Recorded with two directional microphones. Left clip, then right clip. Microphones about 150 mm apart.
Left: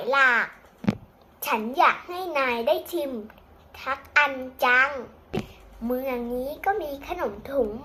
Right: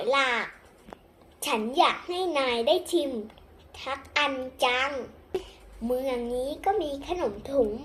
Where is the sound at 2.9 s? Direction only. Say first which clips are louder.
Right 2 dB; 5° left (ahead or behind).